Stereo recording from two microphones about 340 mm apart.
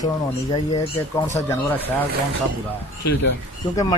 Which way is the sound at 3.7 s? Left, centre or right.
Centre.